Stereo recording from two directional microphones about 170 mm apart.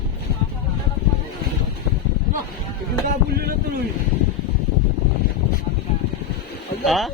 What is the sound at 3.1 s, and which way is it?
Speech, 65° right (ahead or behind).